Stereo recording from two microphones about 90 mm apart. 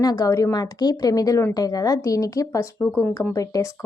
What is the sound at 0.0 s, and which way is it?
Speech, 45° left (ahead or behind).